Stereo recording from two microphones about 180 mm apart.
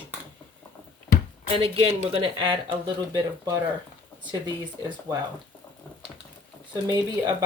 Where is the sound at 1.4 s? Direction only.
30° right (ahead or behind).